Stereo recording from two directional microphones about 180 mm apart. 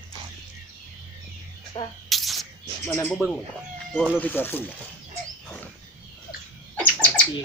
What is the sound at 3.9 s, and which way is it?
Speech, 5° right (ahead or behind).